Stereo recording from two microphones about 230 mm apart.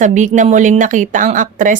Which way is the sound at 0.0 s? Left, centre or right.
Right.